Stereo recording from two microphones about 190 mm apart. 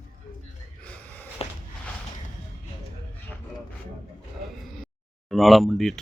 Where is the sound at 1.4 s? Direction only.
30° left (ahead or behind).